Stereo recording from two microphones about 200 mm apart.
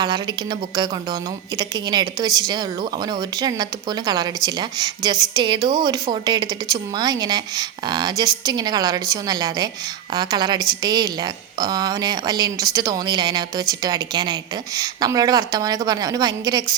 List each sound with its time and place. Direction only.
1.5 s speech: 20° right (ahead or behind)